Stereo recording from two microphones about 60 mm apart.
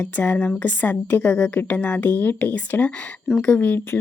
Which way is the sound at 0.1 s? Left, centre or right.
Left.